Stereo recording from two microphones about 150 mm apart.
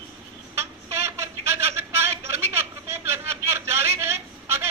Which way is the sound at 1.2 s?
15° right (ahead or behind).